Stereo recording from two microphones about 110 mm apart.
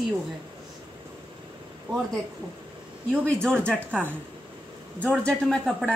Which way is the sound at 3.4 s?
10° left (ahead or behind).